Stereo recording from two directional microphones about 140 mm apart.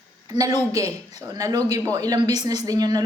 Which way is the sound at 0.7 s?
25° right (ahead or behind).